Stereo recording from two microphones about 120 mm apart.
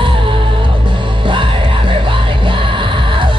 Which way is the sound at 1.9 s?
45° right (ahead or behind).